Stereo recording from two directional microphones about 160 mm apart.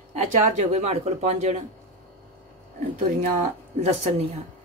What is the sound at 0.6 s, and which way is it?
Speech, 45° right (ahead or behind).